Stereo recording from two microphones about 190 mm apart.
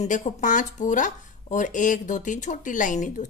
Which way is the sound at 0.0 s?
40° left (ahead or behind).